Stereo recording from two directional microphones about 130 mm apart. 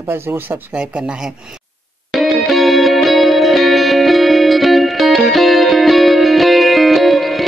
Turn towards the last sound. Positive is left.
turn(degrees=0)  # may be behind; listen again after turning